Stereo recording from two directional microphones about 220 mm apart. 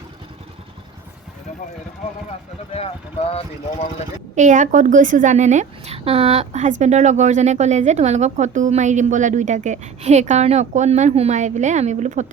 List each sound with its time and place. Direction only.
4.4 s a woman's voice: 35° right (ahead or behind)